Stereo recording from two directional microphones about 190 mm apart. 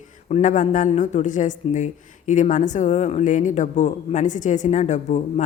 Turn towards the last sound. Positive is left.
turn(degrees=40)  # may be behind; listen again after turning